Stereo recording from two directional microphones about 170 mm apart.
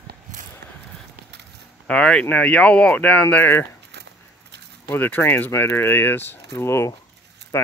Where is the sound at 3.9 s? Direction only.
80° right.